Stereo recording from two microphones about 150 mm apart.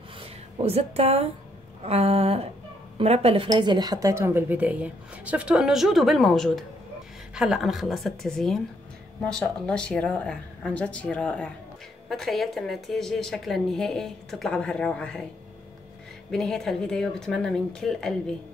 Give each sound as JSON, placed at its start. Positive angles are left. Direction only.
{"t": 0.2, "sound": "speech", "side_deg": -40}
{"t": 1.8, "sound": "a sound", "side_deg": -40}
{"t": 3.4, "sound": "a woman's voice", "side_deg": -30}
{"t": 16.3, "sound": "a woman's voice", "side_deg": 5}